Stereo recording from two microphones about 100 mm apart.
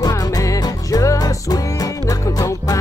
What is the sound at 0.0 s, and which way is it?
Music, 35° left (ahead or behind).